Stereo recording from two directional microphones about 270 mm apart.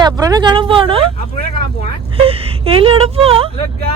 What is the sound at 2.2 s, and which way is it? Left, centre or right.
Speech, right.